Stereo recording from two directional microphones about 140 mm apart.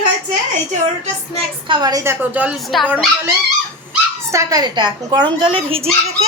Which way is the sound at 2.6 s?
Centre (ahead or behind).